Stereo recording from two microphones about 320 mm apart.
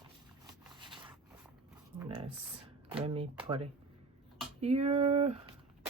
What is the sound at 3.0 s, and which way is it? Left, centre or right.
Speech, centre.